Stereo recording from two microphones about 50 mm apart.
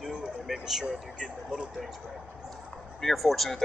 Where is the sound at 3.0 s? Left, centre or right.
Centre.